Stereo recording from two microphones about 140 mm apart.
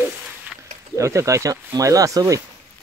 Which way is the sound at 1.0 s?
20° right (ahead or behind).